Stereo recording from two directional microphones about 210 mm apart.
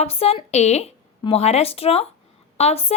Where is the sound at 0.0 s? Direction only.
30° left (ahead or behind).